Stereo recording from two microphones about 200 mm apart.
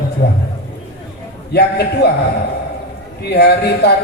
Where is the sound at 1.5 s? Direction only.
55° left (ahead or behind).